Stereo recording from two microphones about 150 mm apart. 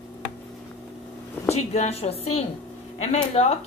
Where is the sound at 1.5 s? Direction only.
45° left (ahead or behind).